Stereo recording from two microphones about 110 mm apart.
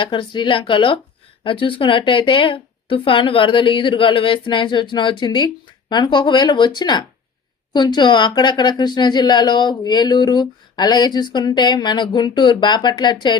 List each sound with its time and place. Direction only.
0.0 s a woman's voice: 45° left (ahead or behind)